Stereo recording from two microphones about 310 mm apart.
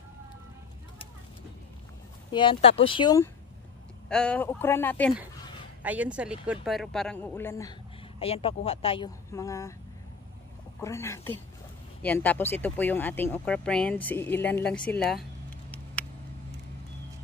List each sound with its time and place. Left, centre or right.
2.3 s speech: centre
10.8 s speech: centre